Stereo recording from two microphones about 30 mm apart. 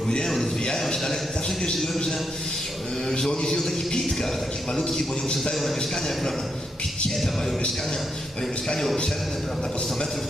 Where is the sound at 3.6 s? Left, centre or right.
Centre.